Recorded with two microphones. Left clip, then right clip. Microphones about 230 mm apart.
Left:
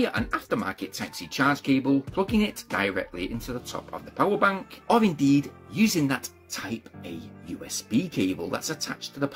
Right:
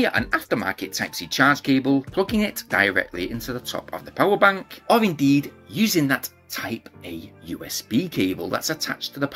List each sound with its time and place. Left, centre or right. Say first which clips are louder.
0.0 s speech: right 6 dB; centre